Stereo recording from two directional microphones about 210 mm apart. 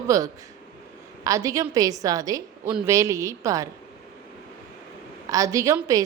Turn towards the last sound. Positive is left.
turn(degrees=-15)  # may be behind; listen again after turning